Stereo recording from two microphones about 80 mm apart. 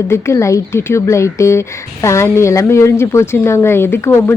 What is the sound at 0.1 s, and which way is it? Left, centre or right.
Speech, left.